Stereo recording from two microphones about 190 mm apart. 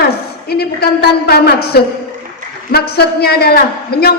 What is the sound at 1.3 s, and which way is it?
A man's voice, 55° left (ahead or behind).